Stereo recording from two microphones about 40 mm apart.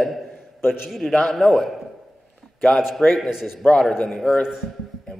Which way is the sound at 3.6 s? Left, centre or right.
Centre.